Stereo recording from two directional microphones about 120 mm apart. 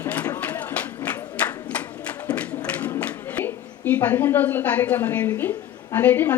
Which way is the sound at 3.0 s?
15° left (ahead or behind).